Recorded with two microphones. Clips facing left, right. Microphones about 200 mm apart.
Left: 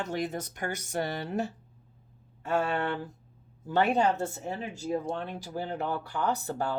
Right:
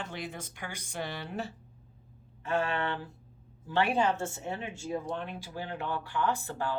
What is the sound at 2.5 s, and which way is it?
Speech, 45° left (ahead or behind).